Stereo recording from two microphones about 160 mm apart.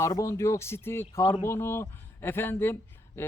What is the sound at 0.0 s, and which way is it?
A man's voice, 20° left (ahead or behind).